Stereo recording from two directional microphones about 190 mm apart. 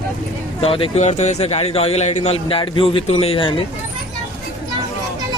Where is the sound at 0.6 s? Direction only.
30° left (ahead or behind).